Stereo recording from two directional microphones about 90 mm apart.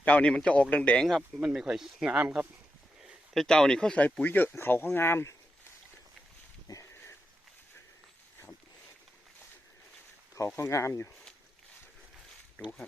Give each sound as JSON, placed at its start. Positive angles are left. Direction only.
{"t": 0.0, "sound": "speech", "side_deg": 15}
{"t": 1.0, "sound": "speech", "side_deg": 0}
{"t": 3.3, "sound": "speech", "side_deg": 5}
{"t": 6.9, "sound": "sniff", "side_deg": 25}
{"t": 10.6, "sound": "speech", "side_deg": 35}